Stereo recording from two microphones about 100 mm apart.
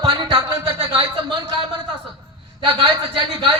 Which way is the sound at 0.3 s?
60° right (ahead or behind).